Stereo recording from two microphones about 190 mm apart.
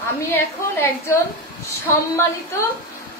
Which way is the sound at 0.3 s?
10° left (ahead or behind).